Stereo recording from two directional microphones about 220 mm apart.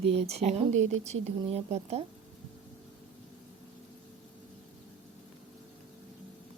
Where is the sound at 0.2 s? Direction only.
30° right (ahead or behind).